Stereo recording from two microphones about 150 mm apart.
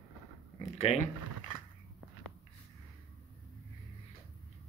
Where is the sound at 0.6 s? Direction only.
45° left (ahead or behind).